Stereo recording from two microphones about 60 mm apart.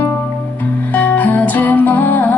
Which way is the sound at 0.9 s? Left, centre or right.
Left.